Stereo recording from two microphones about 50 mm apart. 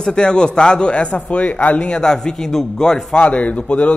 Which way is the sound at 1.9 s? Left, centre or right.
Centre.